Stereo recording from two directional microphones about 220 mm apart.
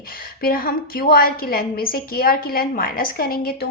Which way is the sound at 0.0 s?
40° left (ahead or behind).